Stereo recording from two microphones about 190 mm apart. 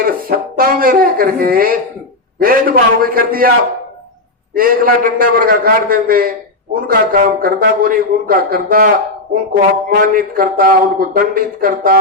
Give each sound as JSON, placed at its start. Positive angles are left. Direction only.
{"t": 0.0, "sound": "speech", "side_deg": -50}
{"t": 4.5, "sound": "speech", "side_deg": -50}